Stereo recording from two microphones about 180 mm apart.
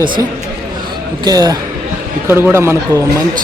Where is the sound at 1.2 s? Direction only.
20° right (ahead or behind).